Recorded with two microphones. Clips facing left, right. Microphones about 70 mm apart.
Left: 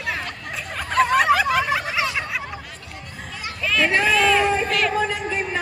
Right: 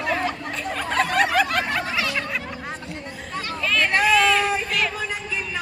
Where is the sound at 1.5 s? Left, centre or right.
Centre.